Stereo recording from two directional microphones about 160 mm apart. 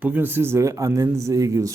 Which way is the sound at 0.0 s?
10° right (ahead or behind).